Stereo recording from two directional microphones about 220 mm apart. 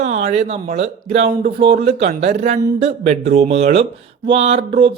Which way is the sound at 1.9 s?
30° right (ahead or behind).